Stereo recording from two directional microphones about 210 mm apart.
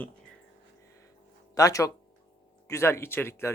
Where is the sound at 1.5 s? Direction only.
15° left (ahead or behind).